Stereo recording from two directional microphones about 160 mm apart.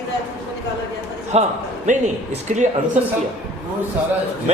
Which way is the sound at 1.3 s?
40° right (ahead or behind).